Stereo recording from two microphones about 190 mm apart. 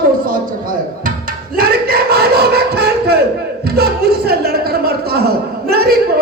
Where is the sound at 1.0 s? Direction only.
50° right (ahead or behind).